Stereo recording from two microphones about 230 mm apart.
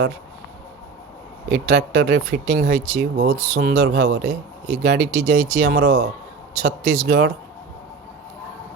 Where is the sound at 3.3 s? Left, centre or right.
Right.